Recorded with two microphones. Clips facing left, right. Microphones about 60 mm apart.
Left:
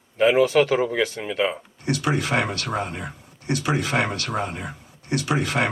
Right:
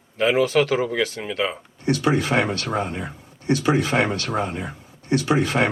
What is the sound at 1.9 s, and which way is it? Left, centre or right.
Speech, right.